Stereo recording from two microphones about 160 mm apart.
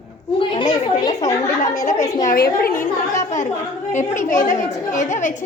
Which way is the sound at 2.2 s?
60° left (ahead or behind).